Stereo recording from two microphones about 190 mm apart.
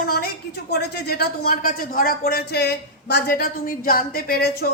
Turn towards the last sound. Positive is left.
turn(degrees=55)  # may be behind; listen again after turning